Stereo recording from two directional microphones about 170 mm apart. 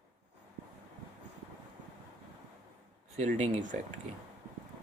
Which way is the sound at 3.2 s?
40° right (ahead or behind).